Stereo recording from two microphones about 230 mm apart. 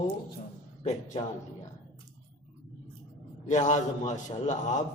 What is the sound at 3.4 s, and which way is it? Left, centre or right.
Speech, left.